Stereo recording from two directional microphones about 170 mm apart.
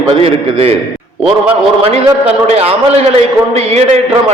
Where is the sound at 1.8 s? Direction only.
35° right (ahead or behind).